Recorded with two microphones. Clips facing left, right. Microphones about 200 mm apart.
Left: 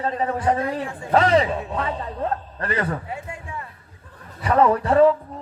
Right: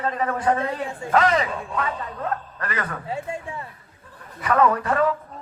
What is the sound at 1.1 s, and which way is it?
A man's voice, 30° left (ahead or behind).